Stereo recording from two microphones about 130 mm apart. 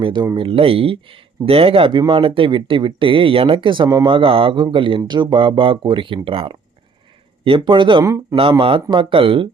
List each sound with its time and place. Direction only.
0.0 s speech: 35° right (ahead or behind)
8.0 s speech: 25° right (ahead or behind)
8.4 s speech: 45° right (ahead or behind)